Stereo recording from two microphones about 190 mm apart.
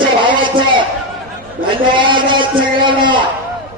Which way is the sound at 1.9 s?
25° right (ahead or behind).